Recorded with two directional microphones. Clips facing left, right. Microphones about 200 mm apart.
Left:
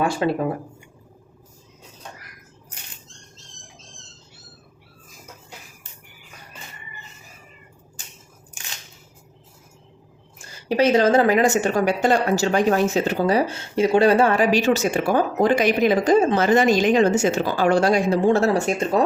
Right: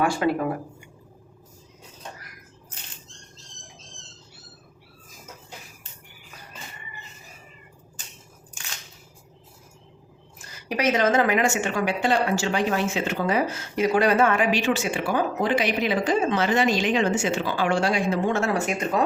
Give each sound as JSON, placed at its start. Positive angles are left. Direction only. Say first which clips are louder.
{"t": 0.0, "sound": "speech", "louder": "left 1 dB", "side_deg": 25}
{"t": 10.3, "sound": "a woman's voice", "louder": "left 8 dB", "side_deg": 30}